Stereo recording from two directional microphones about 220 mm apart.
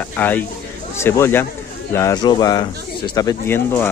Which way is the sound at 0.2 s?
10° left (ahead or behind).